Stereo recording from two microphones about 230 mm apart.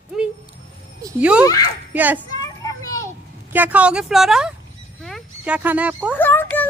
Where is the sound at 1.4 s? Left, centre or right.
Centre.